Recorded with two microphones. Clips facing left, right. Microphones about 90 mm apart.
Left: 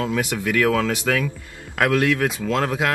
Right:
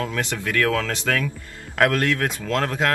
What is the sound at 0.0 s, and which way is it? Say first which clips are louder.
Speech: left 3 dB; 10° left (ahead or behind).